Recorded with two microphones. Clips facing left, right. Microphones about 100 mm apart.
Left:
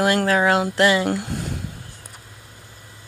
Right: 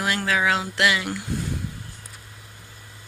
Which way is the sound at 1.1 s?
65° left (ahead or behind).